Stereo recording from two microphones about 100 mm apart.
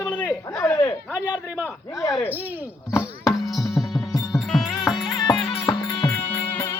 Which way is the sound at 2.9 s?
30° left (ahead or behind).